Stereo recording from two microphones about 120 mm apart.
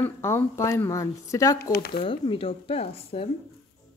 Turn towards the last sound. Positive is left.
turn(degrees=55)  # may be behind; listen again after turning